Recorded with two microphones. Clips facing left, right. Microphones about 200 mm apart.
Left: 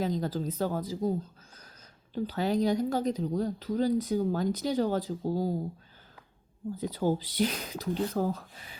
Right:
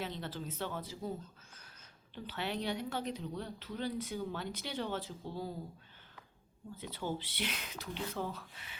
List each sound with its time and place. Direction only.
0.0 s speech: 40° left (ahead or behind)
2.1 s speech: 40° left (ahead or behind)
6.7 s speech: 40° left (ahead or behind)